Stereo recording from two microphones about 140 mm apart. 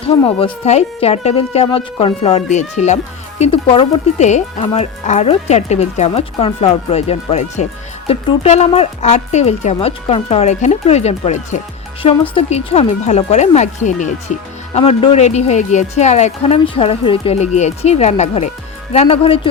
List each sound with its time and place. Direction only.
0.3 s speech: 40° left (ahead or behind)
4.2 s speech: 55° left (ahead or behind)